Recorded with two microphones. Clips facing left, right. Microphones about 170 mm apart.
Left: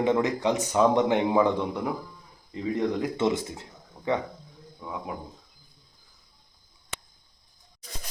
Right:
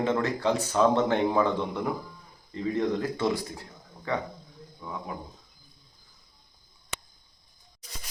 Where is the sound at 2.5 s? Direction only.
15° left (ahead or behind).